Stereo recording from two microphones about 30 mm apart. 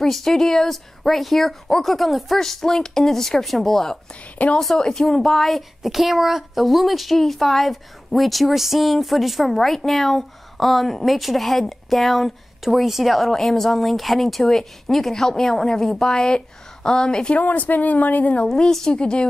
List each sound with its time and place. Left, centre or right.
0.0 s speech: centre
2.3 s speech: centre
5.8 s a woman's voice: centre
9.5 s a woman's voice: centre
13.3 s speech: centre
15.1 s a woman's voice: centre
17.4 s speech: left
18.9 s speech: left